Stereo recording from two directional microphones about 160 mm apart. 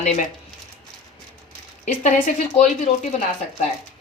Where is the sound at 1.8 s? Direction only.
55° left (ahead or behind).